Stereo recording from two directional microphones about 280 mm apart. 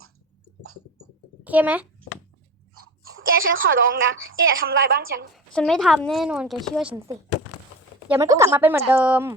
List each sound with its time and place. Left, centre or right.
1.5 s a child's voice: centre
2.7 s speech: right
4.6 s a woman's voice: right
5.5 s speech: centre
8.1 s a woman's voice: centre